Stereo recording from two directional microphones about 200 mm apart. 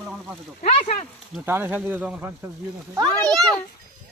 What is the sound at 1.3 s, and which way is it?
Speech, 10° right (ahead or behind).